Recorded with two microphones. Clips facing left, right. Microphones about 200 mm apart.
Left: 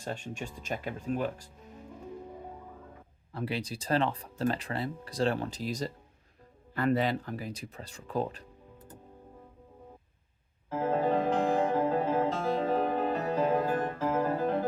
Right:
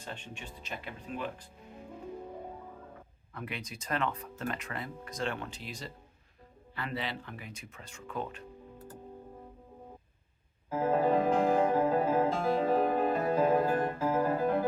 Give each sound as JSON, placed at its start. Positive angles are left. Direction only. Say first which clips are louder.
{"t": 0.0, "sound": "speech", "louder": "left 7 dB", "side_deg": 45}
{"t": 3.3, "sound": "speech", "louder": "left 7 dB", "side_deg": 30}
{"t": 10.7, "sound": "music", "louder": "right 1 dB", "side_deg": -10}
{"t": 14.0, "sound": "piano", "louder": "left 1 dB", "side_deg": -10}